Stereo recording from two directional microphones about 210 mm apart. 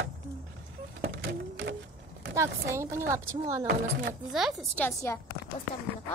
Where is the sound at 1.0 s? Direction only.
55° right (ahead or behind).